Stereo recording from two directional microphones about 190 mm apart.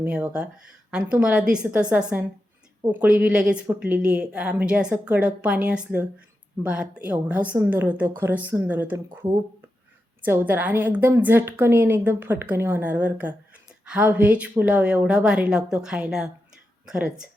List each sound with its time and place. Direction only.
0.0 s a woman's voice: 5° right (ahead or behind)
10.2 s a woman's voice: 10° right (ahead or behind)